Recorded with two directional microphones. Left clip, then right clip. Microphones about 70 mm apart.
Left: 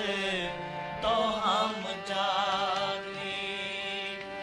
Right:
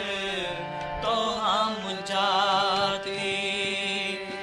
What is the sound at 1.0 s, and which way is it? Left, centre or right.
Music, left.